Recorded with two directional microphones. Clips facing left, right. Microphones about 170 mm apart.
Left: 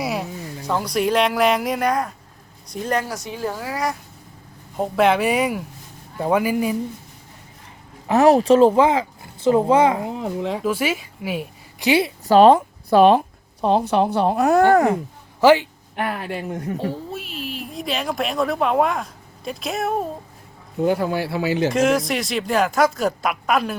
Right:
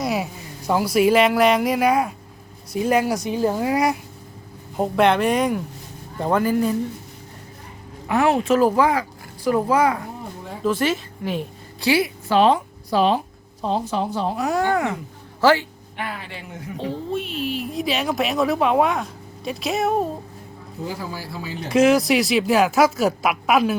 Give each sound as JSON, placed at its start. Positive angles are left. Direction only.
{"t": 0.0, "sound": "a sound", "side_deg": 0}
{"t": 0.7, "sound": "a woman's voice", "side_deg": -5}
{"t": 4.8, "sound": "speech", "side_deg": 5}
{"t": 8.0, "sound": "speech", "side_deg": 35}
{"t": 10.1, "sound": "speech", "side_deg": 85}
{"t": 10.6, "sound": "a woman's voice", "side_deg": 10}
{"t": 11.9, "sound": "a woman's voice", "side_deg": 25}
{"t": 12.3, "sound": "speech", "side_deg": 45}
{"t": 15.4, "sound": "a man's voice", "side_deg": 15}
{"t": 16.0, "sound": "speech", "side_deg": 55}
{"t": 17.1, "sound": "a woman's voice", "side_deg": 0}
{"t": 20.8, "sound": "speech", "side_deg": 65}
{"t": 21.7, "sound": "a woman's voice", "side_deg": 0}